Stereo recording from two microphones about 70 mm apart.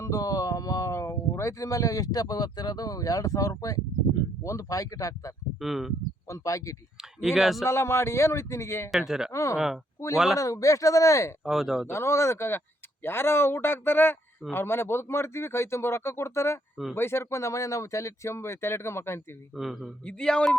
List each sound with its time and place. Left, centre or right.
0.0 s a sound: left
1.4 s speech: left
5.5 s speech: centre
6.2 s speech: left
7.2 s speech: centre
7.6 s speech: left
8.9 s speech: centre
9.3 s speech: left
9.6 s speech: centre
10.3 s speech: left
11.4 s speech: centre
11.9 s speech: left
19.5 s speech: centre
20.1 s a man's voice: centre